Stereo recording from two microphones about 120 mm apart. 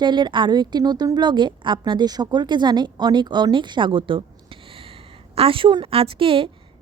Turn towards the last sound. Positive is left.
turn(degrees=-50)  # may be behind; listen again after turning